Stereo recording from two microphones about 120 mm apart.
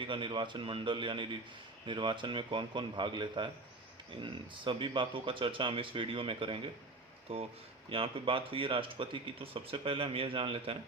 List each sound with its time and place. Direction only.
0.0 s speech: 45° right (ahead or behind)